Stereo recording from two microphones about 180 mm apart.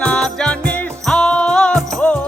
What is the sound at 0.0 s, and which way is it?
Music, 5° left (ahead or behind).